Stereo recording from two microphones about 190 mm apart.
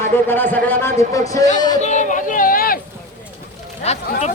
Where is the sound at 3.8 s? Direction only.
35° left (ahead or behind).